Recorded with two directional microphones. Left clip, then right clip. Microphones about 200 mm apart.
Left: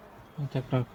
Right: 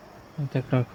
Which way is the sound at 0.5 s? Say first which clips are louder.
Right 4 dB; 35° right (ahead or behind).